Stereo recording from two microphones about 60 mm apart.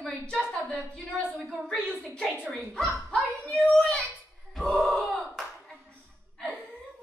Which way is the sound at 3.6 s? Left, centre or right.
Centre.